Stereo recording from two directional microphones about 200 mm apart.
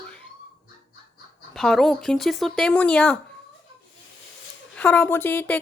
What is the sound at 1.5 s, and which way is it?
Speech, centre (ahead or behind).